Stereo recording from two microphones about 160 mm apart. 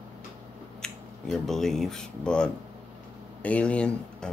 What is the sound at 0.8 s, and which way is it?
Speech, centre (ahead or behind).